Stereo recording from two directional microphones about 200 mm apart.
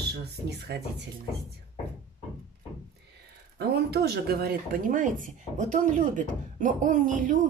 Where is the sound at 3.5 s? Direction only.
55° right (ahead or behind).